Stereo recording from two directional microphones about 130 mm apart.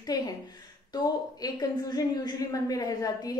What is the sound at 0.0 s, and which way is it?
A woman's voice, 30° left (ahead or behind).